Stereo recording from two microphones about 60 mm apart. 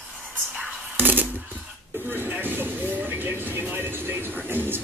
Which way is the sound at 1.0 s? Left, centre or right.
Right.